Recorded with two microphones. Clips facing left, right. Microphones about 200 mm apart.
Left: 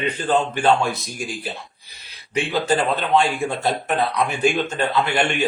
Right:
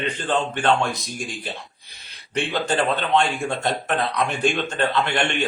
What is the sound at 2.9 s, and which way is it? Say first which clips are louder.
A man's voice: left 2 dB; 5° left (ahead or behind).